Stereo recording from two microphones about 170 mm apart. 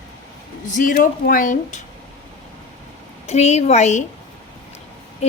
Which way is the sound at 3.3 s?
40° left (ahead or behind).